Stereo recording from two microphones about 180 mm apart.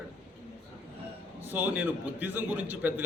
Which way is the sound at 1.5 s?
10° right (ahead or behind).